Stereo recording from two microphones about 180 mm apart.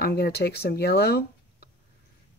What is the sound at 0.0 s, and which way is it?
Speech, 60° left (ahead or behind).